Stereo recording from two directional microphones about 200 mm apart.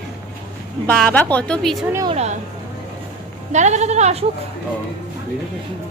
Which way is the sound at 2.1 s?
30° right (ahead or behind).